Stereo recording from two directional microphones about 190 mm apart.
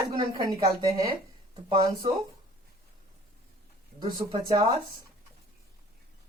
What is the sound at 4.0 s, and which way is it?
Speech, 25° right (ahead or behind).